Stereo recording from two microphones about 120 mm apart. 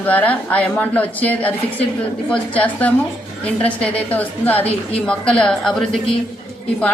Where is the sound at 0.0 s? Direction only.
15° left (ahead or behind).